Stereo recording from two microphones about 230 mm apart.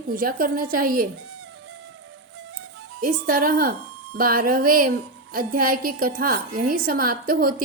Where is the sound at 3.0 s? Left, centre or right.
Right.